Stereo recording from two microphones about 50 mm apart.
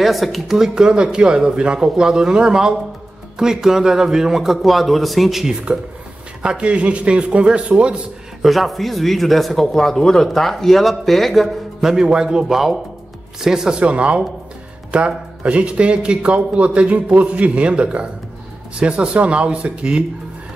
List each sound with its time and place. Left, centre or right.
0.0 s speech: centre
6.4 s a man's voice: centre
8.4 s speech: centre
11.9 s a man's voice: centre